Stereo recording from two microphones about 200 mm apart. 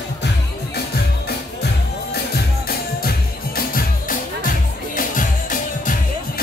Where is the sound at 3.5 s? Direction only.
45° left (ahead or behind).